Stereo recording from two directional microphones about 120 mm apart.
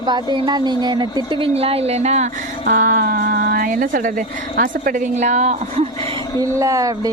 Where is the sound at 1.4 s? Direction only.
55° right (ahead or behind).